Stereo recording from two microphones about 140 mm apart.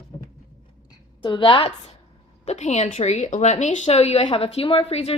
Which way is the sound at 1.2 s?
35° left (ahead or behind).